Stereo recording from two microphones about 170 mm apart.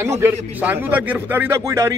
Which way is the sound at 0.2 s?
10° right (ahead or behind).